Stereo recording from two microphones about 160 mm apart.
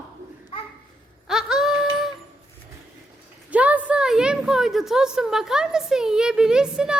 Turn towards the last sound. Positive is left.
turn(degrees=-5)  # may be behind; listen again after turning